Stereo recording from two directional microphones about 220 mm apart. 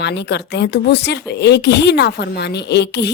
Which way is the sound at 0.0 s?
50° left (ahead or behind).